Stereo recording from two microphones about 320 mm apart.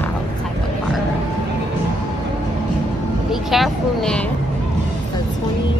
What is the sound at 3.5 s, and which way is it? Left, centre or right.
Vehicle, centre.